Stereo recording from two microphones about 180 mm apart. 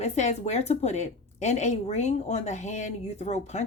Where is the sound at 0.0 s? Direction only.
40° left (ahead or behind).